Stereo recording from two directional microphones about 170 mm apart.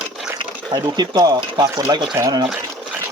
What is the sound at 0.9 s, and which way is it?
Speech, 25° right (ahead or behind).